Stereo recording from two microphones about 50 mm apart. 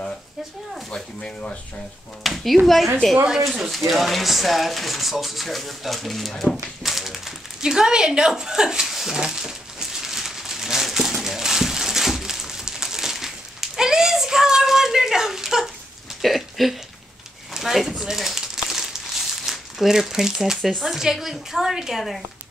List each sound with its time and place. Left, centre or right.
0.8 s speech: centre
2.2 s speech: centre
6.8 s a sound: centre
9.1 s crumpling: centre
16.2 s a sound: centre
19.4 s a woman's voice: centre